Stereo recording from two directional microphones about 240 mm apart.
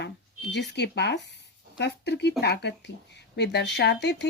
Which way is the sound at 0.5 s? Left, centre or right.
Left.